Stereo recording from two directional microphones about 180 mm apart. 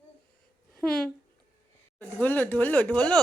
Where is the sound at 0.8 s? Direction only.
5° left (ahead or behind).